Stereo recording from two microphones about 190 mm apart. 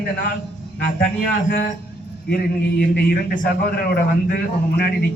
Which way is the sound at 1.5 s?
50° left (ahead or behind).